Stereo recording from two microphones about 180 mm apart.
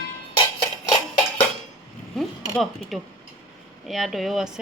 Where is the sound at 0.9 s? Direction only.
25° left (ahead or behind).